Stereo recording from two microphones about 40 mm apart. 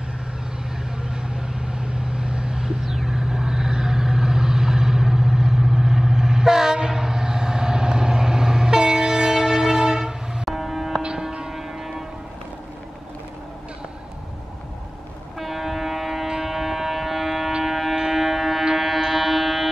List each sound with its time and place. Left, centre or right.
1.0 s vehicle: right
2.8 s vehicle: centre
10.4 s music: centre
11.0 s a sound: right
11.5 s music: centre
15.3 s a sound: centre
17.6 s music: centre